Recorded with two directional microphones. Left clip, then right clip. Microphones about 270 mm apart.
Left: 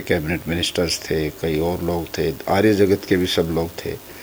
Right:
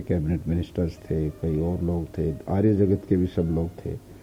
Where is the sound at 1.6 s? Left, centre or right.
Left.